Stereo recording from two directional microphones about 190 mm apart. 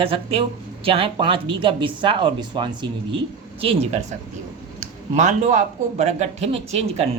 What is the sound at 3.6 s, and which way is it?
Speech, 35° right (ahead or behind).